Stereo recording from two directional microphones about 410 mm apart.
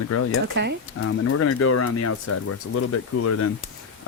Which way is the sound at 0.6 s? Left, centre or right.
Right.